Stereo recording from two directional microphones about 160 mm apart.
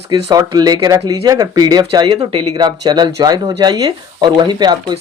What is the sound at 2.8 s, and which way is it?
Speech, 25° right (ahead or behind).